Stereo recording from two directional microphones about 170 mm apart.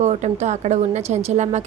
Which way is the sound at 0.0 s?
45° right (ahead or behind).